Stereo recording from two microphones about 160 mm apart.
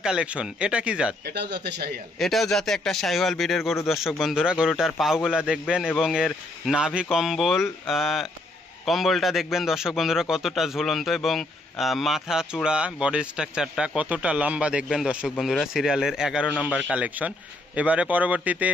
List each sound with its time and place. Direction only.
0.0 s speech: 5° right (ahead or behind)
1.2 s a man's voice: 90° right
2.1 s a man's voice: centre (ahead or behind)